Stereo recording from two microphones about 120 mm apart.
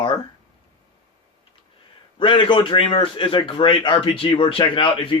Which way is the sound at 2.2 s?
45° left (ahead or behind).